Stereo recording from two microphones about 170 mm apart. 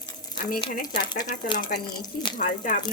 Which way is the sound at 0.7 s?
55° left (ahead or behind).